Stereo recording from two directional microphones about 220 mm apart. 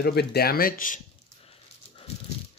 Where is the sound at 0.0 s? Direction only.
45° left (ahead or behind); by 2.0 s 25° left (ahead or behind).